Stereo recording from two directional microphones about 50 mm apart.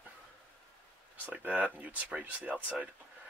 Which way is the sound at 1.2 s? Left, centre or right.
Right.